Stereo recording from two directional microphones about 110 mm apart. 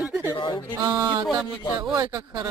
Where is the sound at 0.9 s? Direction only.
40° right (ahead or behind).